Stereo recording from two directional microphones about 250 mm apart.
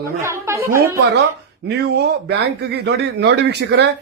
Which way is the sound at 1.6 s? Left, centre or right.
Right.